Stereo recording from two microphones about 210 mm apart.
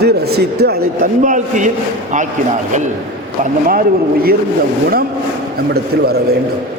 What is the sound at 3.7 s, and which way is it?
Speech, 45° right (ahead or behind).